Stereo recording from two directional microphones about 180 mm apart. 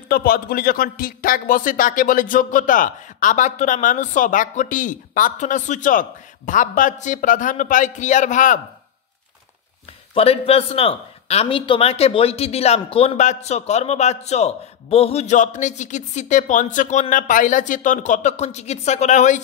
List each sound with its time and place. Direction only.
0.1 s a man's voice: 55° left (ahead or behind)
10.1 s speech: 35° left (ahead or behind)